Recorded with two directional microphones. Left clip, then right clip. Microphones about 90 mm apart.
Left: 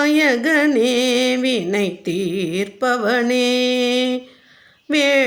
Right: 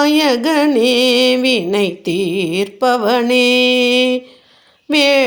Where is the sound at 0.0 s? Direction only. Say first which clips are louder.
Right 3 dB; 25° right (ahead or behind).